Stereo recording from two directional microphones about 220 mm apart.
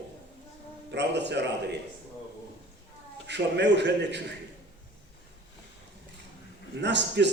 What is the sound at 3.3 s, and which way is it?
Speech, 50° right (ahead or behind).